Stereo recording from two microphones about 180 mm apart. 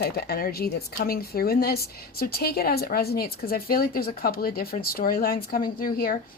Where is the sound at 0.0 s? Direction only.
60° left (ahead or behind).